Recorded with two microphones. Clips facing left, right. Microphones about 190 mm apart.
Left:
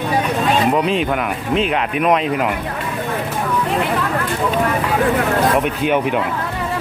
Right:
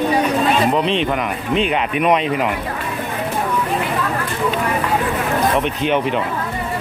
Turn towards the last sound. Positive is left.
turn(degrees=5)  # may be behind; listen again after turning